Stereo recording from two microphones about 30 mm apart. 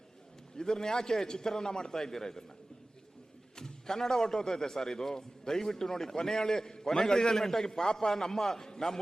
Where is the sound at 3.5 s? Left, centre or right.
Centre.